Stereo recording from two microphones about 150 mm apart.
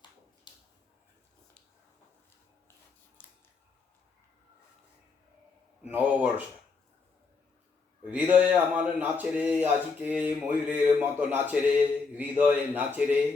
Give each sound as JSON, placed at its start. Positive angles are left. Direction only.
{"t": 0.5, "sound": "a sound", "side_deg": 30}
{"t": 3.2, "sound": "scissors", "side_deg": 10}
{"t": 5.8, "sound": "speech", "side_deg": -10}
{"t": 8.0, "sound": "speech", "side_deg": -10}